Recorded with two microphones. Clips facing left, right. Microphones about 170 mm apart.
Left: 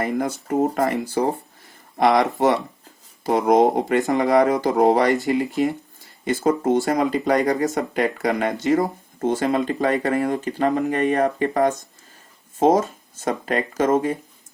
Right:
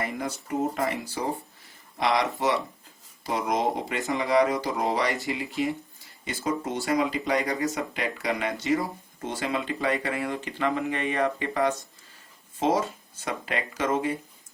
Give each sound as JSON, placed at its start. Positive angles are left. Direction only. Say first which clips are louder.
{"t": 0.0, "sound": "speech", "louder": "left 8 dB", "side_deg": 50}